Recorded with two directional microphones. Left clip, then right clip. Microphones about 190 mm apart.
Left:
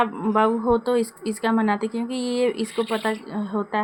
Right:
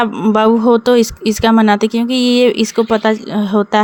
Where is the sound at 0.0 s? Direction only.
40° right (ahead or behind).